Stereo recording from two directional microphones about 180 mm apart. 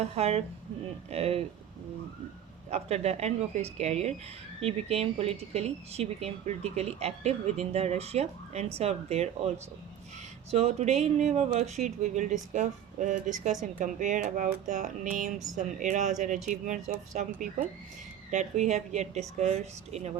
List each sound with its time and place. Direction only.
0.0 s speech: 35° right (ahead or behind)
2.6 s speech: 35° right (ahead or behind)
10.5 s speech: 35° right (ahead or behind)